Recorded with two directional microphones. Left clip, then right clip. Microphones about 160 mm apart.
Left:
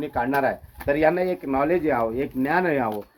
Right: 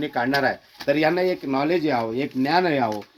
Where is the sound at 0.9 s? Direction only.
90° right.